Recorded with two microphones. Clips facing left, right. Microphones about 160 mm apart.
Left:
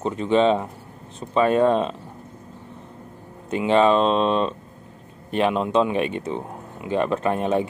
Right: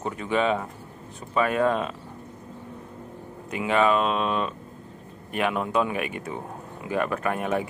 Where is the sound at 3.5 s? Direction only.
30° left (ahead or behind).